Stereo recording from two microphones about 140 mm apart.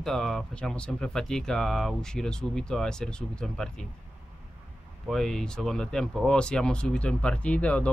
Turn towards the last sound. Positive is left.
turn(degrees=10)  # may be behind; listen again after turning